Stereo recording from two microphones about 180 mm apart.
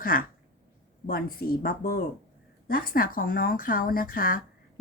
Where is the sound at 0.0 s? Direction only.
55° left (ahead or behind).